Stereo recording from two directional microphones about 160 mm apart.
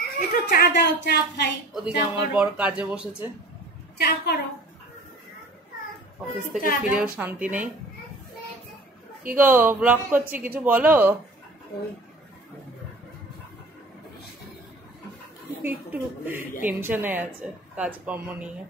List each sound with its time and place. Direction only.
0.0 s speech: 85° left
1.7 s a woman's voice: 5° right (ahead or behind)
4.0 s a woman's voice: 75° left (ahead or behind)
6.8 s a woman's voice: 5° right (ahead or behind)
9.3 s a woman's voice: 10° right (ahead or behind)
15.6 s a woman's voice: 15° right (ahead or behind)